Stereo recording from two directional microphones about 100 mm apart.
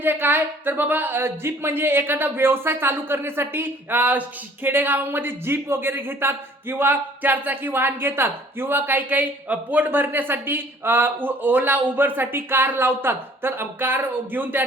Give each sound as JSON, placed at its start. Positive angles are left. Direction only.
{"t": 0.0, "sound": "speech", "side_deg": -20}